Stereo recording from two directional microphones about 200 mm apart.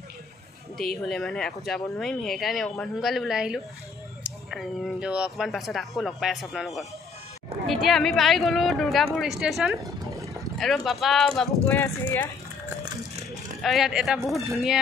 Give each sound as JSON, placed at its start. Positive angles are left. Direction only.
{"t": 0.7, "sound": "speech", "side_deg": 0}
{"t": 13.3, "sound": "speech", "side_deg": 0}